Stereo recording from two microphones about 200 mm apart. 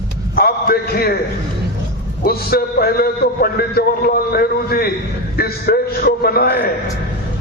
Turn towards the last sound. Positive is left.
turn(degrees=50)  # may be behind; listen again after turning